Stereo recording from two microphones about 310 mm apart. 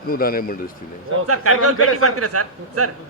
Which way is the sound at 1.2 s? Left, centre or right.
Right.